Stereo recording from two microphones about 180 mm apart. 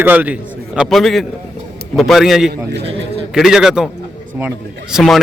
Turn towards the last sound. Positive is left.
turn(degrees=0)  # may be behind; listen again after turning